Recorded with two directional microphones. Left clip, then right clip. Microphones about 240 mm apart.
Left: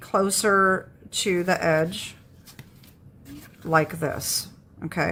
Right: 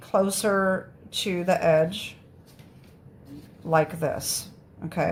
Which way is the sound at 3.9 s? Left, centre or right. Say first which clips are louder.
Even; left.